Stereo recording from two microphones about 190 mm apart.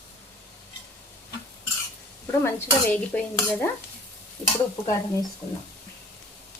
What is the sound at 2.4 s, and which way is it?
Stir, 10° left (ahead or behind).